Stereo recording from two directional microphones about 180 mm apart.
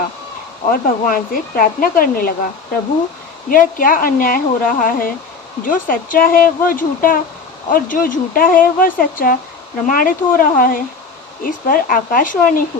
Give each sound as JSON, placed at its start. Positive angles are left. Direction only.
{"t": 0.7, "sound": "speech", "side_deg": 50}
{"t": 3.5, "sound": "speech", "side_deg": 50}